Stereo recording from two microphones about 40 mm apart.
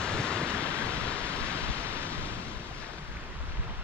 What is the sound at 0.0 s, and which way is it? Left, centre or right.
Waves, left.